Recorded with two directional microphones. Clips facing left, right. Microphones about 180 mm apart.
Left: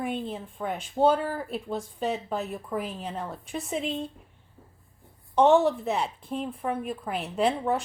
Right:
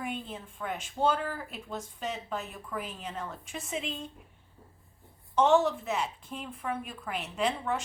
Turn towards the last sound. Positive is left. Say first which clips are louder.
# left 5 dB
turn(degrees=35)  # may be behind; listen again after turning